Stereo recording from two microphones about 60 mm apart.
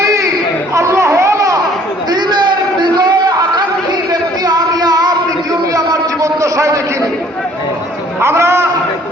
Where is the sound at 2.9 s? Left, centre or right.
Right.